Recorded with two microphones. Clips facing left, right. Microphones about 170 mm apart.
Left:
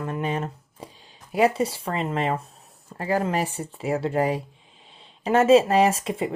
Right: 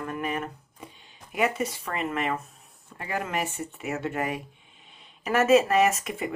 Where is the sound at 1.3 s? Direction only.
35° left (ahead or behind).